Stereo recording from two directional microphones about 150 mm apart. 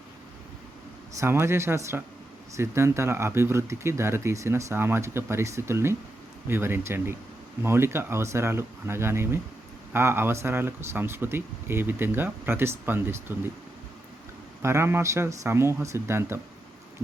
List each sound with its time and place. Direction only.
1.2 s speech: 15° right (ahead or behind)
14.6 s speech: 15° right (ahead or behind)